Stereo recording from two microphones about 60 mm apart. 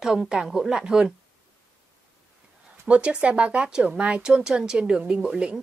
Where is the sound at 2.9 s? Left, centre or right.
Right.